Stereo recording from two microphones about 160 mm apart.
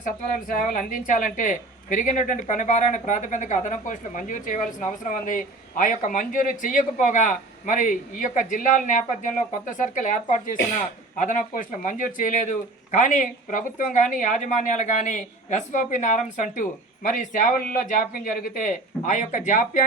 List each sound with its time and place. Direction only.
0.0 s a woman's voice: 55° left (ahead or behind)